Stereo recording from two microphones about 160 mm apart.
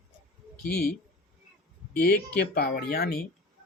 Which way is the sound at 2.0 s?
75° left (ahead or behind).